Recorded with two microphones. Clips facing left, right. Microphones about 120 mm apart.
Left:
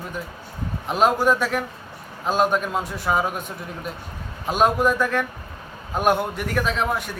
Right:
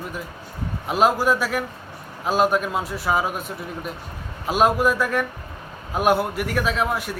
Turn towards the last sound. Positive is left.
turn(degrees=-5)  # may be behind; listen again after turning